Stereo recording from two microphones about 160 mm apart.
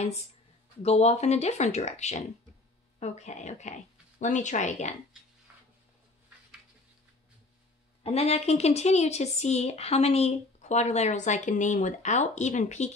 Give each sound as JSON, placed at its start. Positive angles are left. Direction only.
{"t": 0.8, "sound": "speech", "side_deg": 40}
{"t": 8.0, "sound": "speech", "side_deg": 40}